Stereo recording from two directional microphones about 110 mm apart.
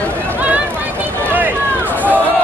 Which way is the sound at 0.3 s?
15° right (ahead or behind).